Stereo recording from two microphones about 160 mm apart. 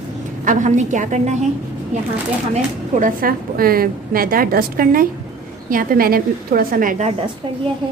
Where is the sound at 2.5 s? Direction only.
55° right (ahead or behind).